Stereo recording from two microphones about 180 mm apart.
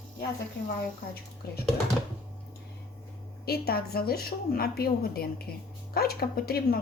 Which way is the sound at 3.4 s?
60° left (ahead or behind).